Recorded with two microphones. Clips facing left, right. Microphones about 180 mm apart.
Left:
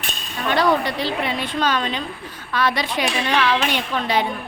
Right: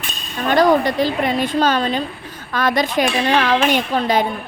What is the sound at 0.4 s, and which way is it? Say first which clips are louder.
A woman's voice: right 5 dB; 45° right (ahead or behind).